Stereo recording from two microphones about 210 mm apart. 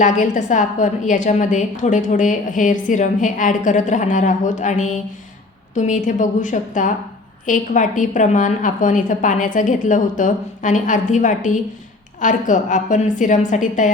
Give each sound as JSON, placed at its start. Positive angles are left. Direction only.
{"t": 0.0, "sound": "a woman's voice", "side_deg": 35}